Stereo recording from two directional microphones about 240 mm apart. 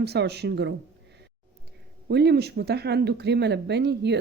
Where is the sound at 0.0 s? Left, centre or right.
Right.